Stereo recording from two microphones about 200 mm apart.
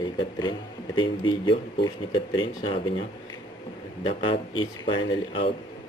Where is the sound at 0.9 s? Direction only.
25° left (ahead or behind).